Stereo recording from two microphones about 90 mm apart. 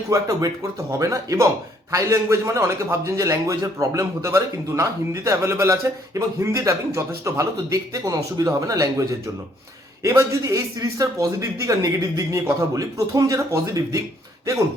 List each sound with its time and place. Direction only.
0.1 s a man's voice: 40° right (ahead or behind)